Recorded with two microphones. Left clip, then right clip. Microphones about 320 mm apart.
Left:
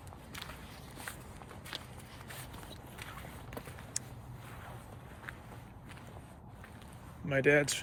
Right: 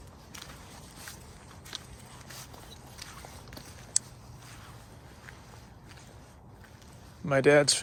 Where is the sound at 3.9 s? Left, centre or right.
Centre.